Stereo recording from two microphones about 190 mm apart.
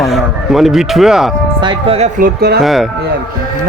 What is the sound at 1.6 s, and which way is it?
Speech, 30° right (ahead or behind).